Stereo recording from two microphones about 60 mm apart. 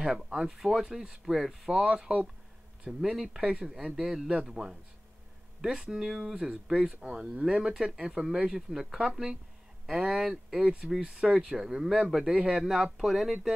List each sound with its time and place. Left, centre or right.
0.0 s speech: centre
1.8 s speech: centre